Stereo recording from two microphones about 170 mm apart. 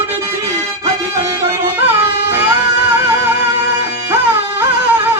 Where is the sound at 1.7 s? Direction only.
10° right (ahead or behind).